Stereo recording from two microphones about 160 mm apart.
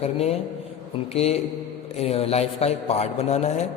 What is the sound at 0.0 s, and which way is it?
A man's voice, 40° left (ahead or behind).